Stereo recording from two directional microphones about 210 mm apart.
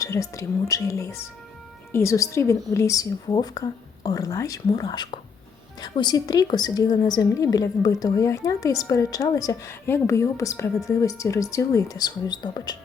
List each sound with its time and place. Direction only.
0.0 s a woman's voice: 15° left (ahead or behind)